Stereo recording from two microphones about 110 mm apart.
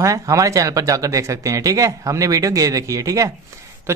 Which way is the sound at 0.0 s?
30° right (ahead or behind).